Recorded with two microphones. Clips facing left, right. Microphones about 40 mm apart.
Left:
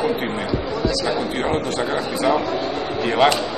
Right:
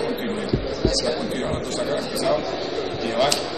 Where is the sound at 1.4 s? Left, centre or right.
Left.